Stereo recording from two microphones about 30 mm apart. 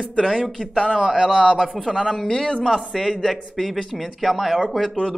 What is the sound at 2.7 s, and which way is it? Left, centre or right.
Speech, centre.